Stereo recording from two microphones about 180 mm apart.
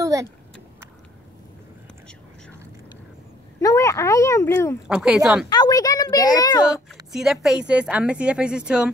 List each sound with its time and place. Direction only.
0.0 s vehicle: 20° right (ahead or behind)
3.6 s speech: 15° left (ahead or behind)
4.8 s a woman's voice: 5° right (ahead or behind)
5.5 s a woman's voice: 20° left (ahead or behind)
7.1 s a woman's voice: centre (ahead or behind)